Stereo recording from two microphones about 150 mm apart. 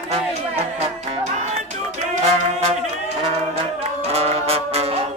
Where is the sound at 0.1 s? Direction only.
45° right (ahead or behind).